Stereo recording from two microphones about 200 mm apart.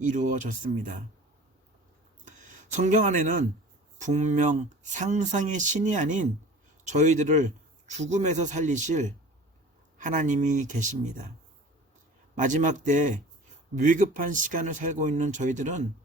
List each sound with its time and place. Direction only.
0.0 s a man's voice: 40° right (ahead or behind)
2.2 s a sound: 40° right (ahead or behind)
3.9 s a man's voice: 35° right (ahead or behind)
12.4 s a man's voice: 40° right (ahead or behind)